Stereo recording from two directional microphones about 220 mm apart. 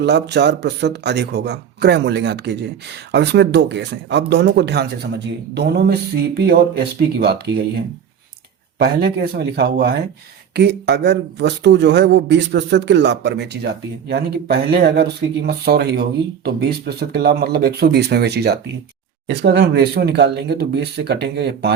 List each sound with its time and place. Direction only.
0.0 s speech: 50° right (ahead or behind)